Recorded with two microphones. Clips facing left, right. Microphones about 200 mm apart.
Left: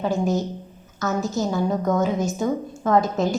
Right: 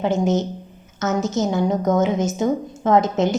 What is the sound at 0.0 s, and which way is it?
A woman's voice, 20° right (ahead or behind).